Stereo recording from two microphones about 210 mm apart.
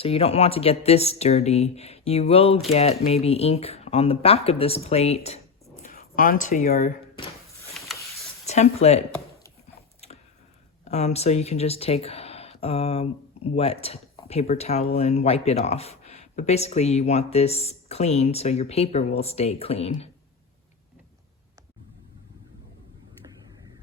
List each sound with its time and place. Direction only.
0.0 s speech: 30° left (ahead or behind)
5.8 s speech: 40° left (ahead or behind)
8.4 s speech: 30° left (ahead or behind)
10.8 s speech: 30° left (ahead or behind)